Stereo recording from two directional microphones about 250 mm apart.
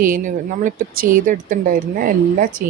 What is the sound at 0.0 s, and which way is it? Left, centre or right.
Speech, right.